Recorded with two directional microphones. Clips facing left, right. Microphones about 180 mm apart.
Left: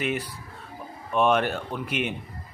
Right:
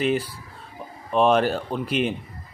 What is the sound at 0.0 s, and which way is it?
Speech, 30° right (ahead or behind).